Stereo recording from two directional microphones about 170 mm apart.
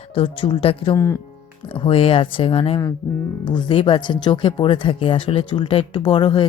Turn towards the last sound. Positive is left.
turn(degrees=30)  # may be behind; listen again after turning